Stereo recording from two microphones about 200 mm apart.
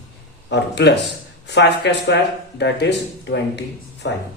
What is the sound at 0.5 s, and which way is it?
A man's voice, 60° left (ahead or behind).